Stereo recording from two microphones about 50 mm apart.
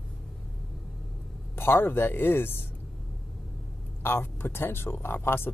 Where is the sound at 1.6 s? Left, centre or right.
Left.